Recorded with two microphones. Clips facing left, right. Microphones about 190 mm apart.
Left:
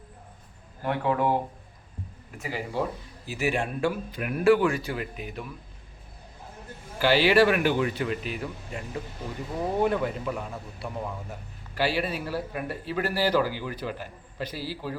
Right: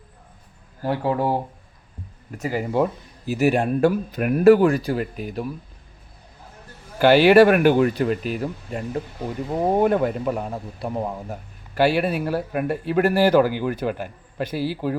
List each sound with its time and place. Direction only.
0.8 s speech: 35° right (ahead or behind)
2.4 s a man's voice: 45° right (ahead or behind)
7.0 s a man's voice: 50° right (ahead or behind)